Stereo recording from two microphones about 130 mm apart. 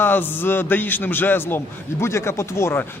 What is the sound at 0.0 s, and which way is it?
A man's voice, 15° left (ahead or behind).